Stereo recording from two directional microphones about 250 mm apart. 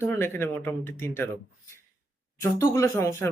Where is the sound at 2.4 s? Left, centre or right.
Centre.